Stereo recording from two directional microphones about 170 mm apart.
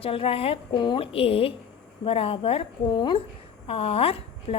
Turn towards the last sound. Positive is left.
turn(degrees=35)  # may be behind; listen again after turning